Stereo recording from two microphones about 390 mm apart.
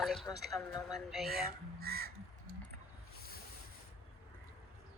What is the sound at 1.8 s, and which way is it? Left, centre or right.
Speech, right.